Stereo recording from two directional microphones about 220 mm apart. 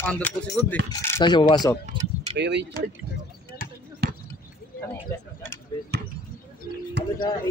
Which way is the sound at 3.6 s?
40° left (ahead or behind).